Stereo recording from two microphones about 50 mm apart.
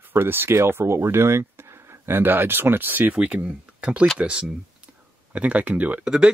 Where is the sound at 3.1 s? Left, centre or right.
Right.